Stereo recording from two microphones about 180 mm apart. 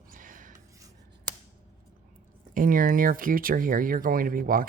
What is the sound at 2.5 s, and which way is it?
Speech, 50° right (ahead or behind).